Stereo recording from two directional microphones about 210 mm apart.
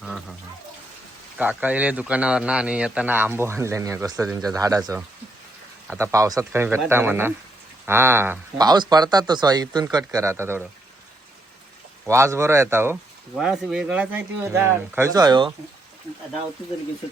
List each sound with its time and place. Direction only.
1.4 s a man's voice: 5° right (ahead or behind)
4.3 s speech: centre (ahead or behind)
4.5 s a man's voice: 15° right (ahead or behind)
5.9 s a man's voice: 15° right (ahead or behind)
12.0 s a man's voice: 15° right (ahead or behind)